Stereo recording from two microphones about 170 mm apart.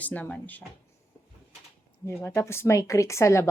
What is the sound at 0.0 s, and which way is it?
Speech, 10° left (ahead or behind).